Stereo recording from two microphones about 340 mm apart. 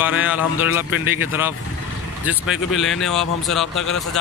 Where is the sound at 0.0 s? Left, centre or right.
Centre.